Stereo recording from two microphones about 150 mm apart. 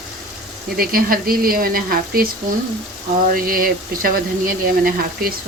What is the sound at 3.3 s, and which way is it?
Speech, 70° right (ahead or behind).